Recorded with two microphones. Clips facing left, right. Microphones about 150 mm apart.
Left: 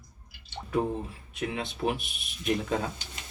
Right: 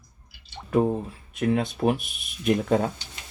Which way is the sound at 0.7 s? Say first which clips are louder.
Right 6 dB; 40° right (ahead or behind).